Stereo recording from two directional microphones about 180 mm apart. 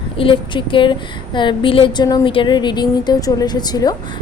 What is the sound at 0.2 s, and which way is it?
A woman's voice, 30° left (ahead or behind).